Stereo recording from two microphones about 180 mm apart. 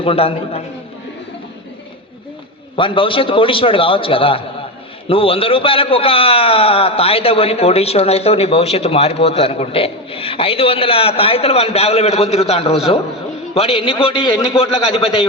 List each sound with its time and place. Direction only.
0.0 s a man's voice: 30° left (ahead or behind)
2.7 s a man's voice: 30° left (ahead or behind)